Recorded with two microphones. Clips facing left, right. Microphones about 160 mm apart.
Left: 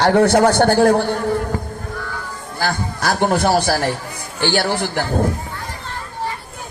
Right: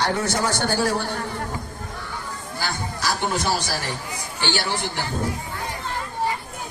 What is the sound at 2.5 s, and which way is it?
A man's voice, 55° left (ahead or behind).